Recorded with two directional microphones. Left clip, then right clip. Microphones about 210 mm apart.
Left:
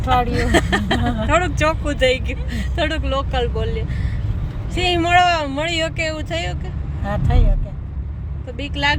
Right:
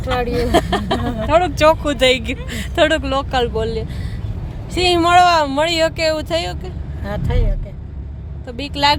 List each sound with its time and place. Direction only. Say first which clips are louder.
0.0 s speech: left 1 dB; 10° right (ahead or behind); by 3.8 s 25° right (ahead or behind)
4.9 s speech: right 4 dB; 20° right (ahead or behind)